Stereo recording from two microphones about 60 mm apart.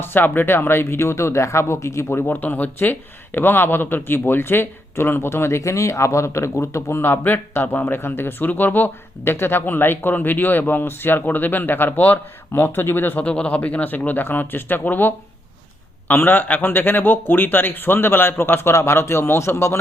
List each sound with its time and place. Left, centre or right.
0.0 s speech: left
13.2 s a man's voice: left